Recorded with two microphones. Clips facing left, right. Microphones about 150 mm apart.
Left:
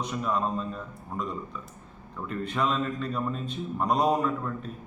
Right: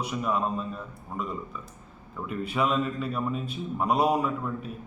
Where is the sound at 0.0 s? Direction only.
10° right (ahead or behind).